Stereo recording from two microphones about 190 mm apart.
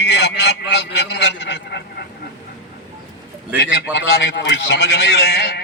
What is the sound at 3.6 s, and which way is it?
A man's voice, 60° left (ahead or behind).